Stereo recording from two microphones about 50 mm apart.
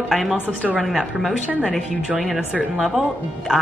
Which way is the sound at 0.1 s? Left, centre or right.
Centre.